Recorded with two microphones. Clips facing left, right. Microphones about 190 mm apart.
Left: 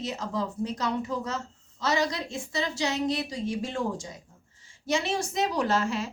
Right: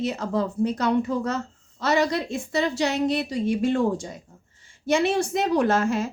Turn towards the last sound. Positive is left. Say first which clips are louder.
# right 5 dB
turn(degrees=-50)  # may be behind; listen again after turning